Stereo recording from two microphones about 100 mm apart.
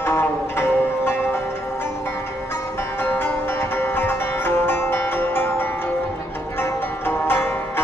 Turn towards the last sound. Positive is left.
turn(degrees=20)  # may be behind; listen again after turning